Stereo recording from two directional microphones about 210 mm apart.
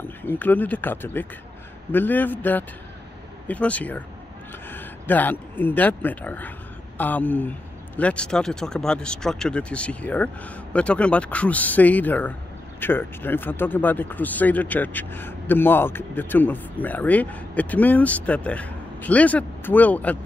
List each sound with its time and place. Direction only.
0.2 s speech: 10° left (ahead or behind)